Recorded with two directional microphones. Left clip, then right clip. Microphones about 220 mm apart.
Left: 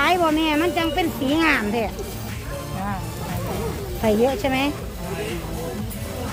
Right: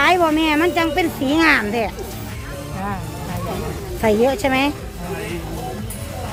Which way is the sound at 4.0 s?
20° right (ahead or behind).